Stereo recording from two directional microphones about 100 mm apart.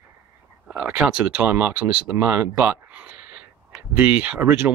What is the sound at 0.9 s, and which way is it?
Speech, 10° right (ahead or behind).